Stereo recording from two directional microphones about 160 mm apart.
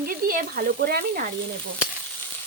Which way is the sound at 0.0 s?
65° right (ahead or behind).